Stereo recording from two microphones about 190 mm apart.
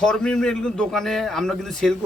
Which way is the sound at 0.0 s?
5° left (ahead or behind).